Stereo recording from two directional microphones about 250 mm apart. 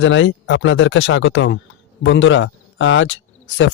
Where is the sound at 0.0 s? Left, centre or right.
Left.